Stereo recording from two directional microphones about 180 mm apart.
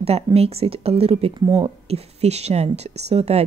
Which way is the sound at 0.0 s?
35° right (ahead or behind).